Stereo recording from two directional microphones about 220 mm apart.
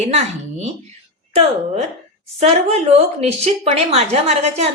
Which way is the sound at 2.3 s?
25° right (ahead or behind).